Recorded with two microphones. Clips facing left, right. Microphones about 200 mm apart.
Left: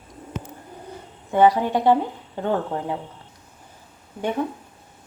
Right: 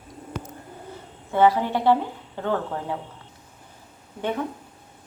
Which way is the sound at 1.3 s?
15° left (ahead or behind).